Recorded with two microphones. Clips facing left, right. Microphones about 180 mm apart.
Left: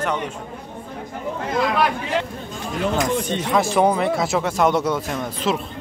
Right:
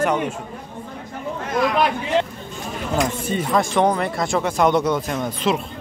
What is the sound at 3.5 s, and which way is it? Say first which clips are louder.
Speech: left 1 dB; 5° left (ahead or behind).